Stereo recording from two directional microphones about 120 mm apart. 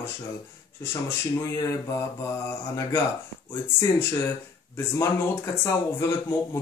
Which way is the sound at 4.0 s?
20° left (ahead or behind).